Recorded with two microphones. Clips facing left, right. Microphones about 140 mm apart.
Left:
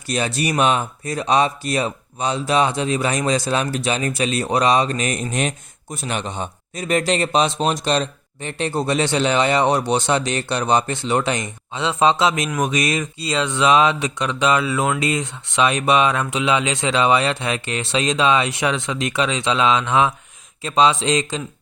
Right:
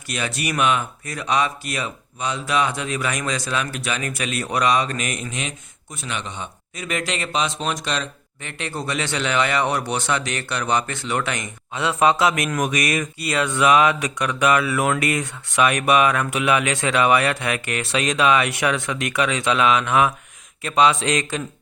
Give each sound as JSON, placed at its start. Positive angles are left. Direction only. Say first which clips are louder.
{"t": 0.1, "sound": "speech", "louder": "left 5 dB", "side_deg": 30}
{"t": 5.3, "sound": "speech", "louder": "left 7 dB", "side_deg": 45}